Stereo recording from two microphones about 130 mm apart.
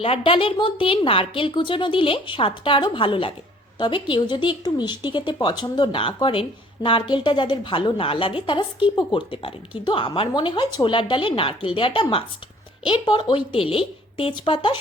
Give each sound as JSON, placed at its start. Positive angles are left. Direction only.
{"t": 0.0, "sound": "a woman's voice", "side_deg": 45}